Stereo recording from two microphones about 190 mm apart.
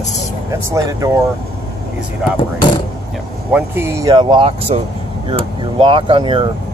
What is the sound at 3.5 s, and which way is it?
Speech, 10° right (ahead or behind).